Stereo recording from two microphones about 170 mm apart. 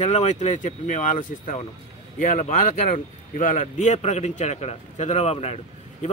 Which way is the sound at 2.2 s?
45° left (ahead or behind).